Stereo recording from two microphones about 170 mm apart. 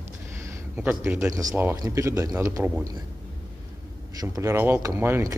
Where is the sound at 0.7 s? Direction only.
10° right (ahead or behind).